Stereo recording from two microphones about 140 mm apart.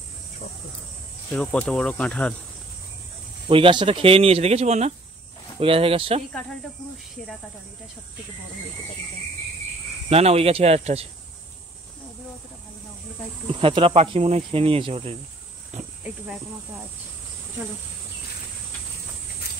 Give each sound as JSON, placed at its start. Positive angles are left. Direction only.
{"t": 1.3, "sound": "speech", "side_deg": 10}
{"t": 3.4, "sound": "speech", "side_deg": -35}
{"t": 5.6, "sound": "speech", "side_deg": -40}
{"t": 10.0, "sound": "speech", "side_deg": -45}
{"t": 13.6, "sound": "speech", "side_deg": -40}